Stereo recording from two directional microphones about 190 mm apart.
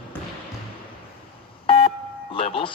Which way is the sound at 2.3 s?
30° left (ahead or behind).